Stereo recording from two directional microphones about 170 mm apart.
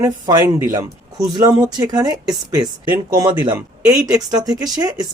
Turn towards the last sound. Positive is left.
turn(degrees=-20)  # may be behind; listen again after turning